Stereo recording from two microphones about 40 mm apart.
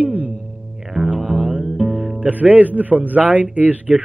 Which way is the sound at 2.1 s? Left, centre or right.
Right.